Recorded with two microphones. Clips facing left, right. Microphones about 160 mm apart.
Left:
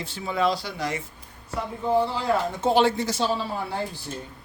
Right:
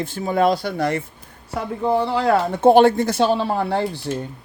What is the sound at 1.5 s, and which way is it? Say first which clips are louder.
Speech: right 3 dB; 75° right (ahead or behind).